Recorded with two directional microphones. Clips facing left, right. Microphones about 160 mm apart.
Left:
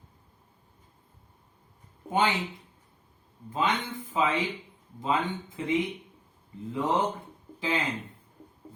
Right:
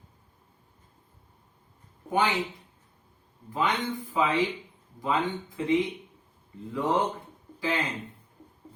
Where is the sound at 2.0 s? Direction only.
20° left (ahead or behind).